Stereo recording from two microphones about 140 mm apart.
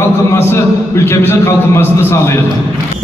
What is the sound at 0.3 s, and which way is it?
A man's voice, 20° left (ahead or behind).